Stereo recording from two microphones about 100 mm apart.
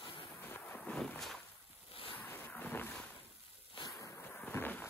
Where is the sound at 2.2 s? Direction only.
20° left (ahead or behind).